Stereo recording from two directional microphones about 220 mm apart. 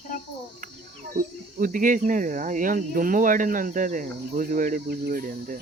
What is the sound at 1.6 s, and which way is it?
Cricket, 35° right (ahead or behind).